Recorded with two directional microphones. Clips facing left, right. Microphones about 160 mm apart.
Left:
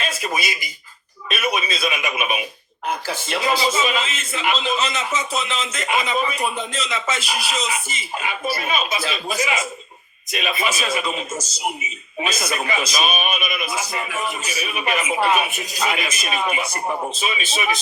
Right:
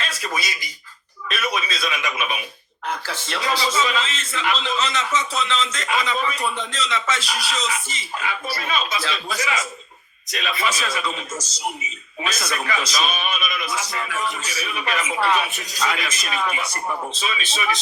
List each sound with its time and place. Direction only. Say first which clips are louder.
1.3 s a man's voice: left 3 dB; 15° left (ahead or behind)